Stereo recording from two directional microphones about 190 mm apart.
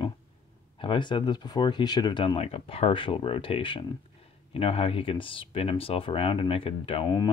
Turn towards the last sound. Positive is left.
turn(degrees=25)  # may be behind; listen again after turning